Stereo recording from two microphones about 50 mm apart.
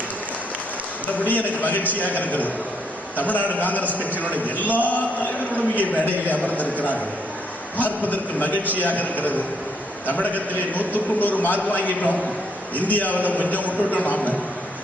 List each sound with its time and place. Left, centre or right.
1.3 s a man's voice: left
3.8 s a man's voice: right
4.2 s a man's voice: left